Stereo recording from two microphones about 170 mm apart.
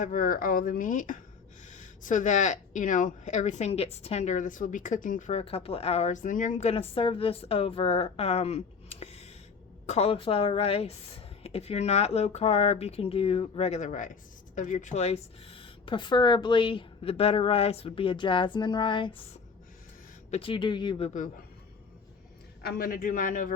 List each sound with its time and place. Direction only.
0.0 s speech: 50° left (ahead or behind); by 19.1 s 30° left (ahead or behind)
20.3 s speech: 30° left (ahead or behind)
22.6 s speech: 55° left (ahead or behind)